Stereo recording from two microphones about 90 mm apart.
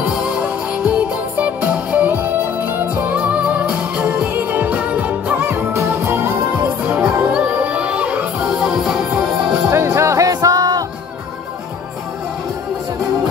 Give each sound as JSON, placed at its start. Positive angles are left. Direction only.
{"t": 0.0, "sound": "music", "side_deg": -15}
{"t": 3.2, "sound": "music", "side_deg": -15}
{"t": 6.6, "sound": "music", "side_deg": -15}
{"t": 9.7, "sound": "music", "side_deg": -30}